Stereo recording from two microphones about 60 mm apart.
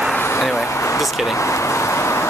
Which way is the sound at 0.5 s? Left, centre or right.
Left.